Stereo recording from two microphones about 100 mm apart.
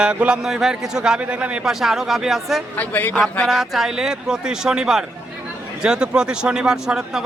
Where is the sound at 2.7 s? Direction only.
15° left (ahead or behind).